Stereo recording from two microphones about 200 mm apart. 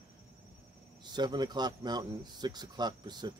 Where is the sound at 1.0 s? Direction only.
20° right (ahead or behind).